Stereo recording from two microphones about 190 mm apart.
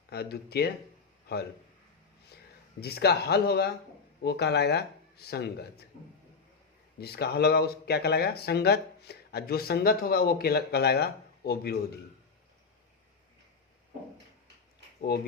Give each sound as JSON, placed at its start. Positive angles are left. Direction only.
{"t": 0.1, "sound": "a man's voice", "side_deg": 55}
{"t": 2.8, "sound": "speech", "side_deg": 55}
{"t": 7.0, "sound": "speech", "side_deg": 60}